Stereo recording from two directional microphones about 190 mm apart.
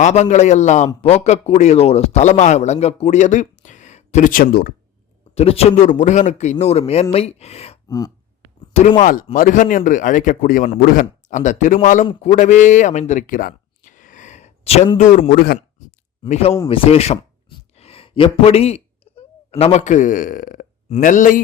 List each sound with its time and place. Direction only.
0.0 s a man's voice: 35° left (ahead or behind)
5.3 s a man's voice: 30° left (ahead or behind)
7.9 s a sound: 20° left (ahead or behind)
8.7 s speech: 35° left (ahead or behind)
16.3 s a man's voice: 30° left (ahead or behind)